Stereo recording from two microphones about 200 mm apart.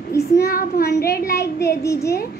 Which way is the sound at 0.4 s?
45° left (ahead or behind).